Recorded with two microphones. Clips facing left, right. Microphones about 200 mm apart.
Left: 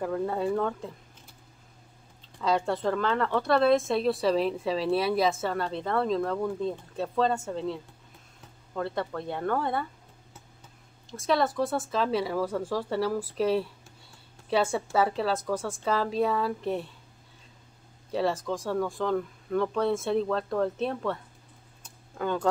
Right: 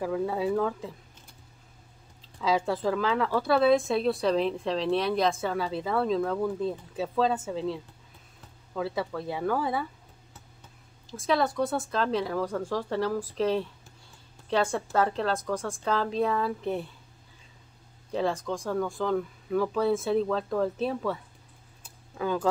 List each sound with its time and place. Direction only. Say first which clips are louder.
0.0 s a woman's voice: even; centre (ahead or behind)
2.3 s a woman's voice: even; centre (ahead or behind)
11.1 s a woman's voice: even; centre (ahead or behind)
18.1 s a woman's voice: left 1 dB; centre (ahead or behind)